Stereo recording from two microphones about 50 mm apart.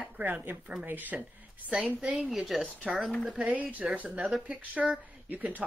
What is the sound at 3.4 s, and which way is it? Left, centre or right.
Speech, right.